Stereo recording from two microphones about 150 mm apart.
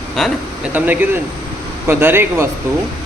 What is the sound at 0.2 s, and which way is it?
Speech, 5° left (ahead or behind).